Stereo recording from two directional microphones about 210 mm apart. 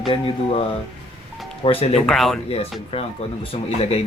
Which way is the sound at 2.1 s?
Centre (ahead or behind).